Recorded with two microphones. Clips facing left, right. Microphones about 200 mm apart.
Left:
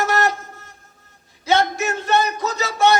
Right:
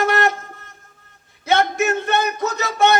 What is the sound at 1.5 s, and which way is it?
Music, 60° right (ahead or behind).